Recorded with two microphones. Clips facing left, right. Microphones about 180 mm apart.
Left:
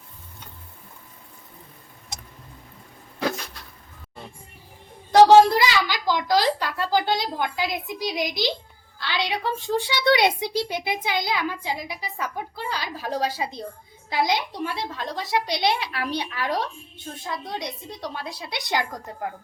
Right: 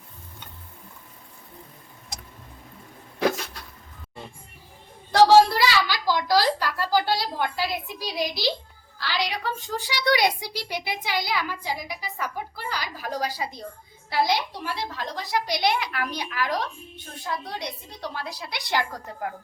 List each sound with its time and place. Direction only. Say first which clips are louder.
5.1 s a child's voice: left 3 dB; 15° left (ahead or behind)